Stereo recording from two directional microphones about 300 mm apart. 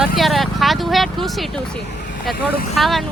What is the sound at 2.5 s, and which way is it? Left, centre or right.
Speech, left.